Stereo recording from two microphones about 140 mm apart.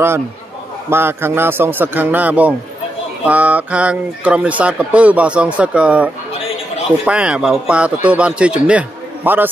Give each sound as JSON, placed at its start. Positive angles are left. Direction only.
{"t": 0.8, "sound": "speech", "side_deg": -15}
{"t": 7.1, "sound": "speech", "side_deg": -10}